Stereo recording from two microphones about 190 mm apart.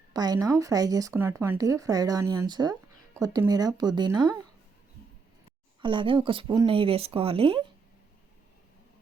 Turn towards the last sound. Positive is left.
turn(degrees=-30)  # may be behind; listen again after turning